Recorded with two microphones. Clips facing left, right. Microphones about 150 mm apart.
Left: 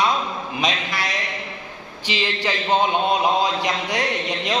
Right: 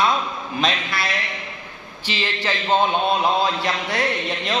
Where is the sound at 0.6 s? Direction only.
15° left (ahead or behind).